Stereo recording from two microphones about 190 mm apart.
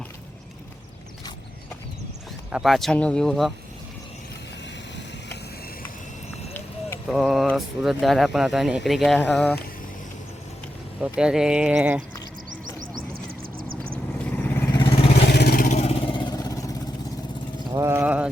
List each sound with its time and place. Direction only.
2.5 s speech: centre (ahead or behind)
7.1 s vehicle: centre (ahead or behind)
7.4 s speech: centre (ahead or behind)
11.0 s speech: 5° right (ahead or behind)
13.2 s a sound: 50° right (ahead or behind)
14.3 s vehicle: 10° left (ahead or behind)
14.8 s vehicle: 30° left (ahead or behind)
15.3 s vehicle: 60° left (ahead or behind); by 16.7 s 20° left (ahead or behind)
17.7 s a sound: 15° right (ahead or behind)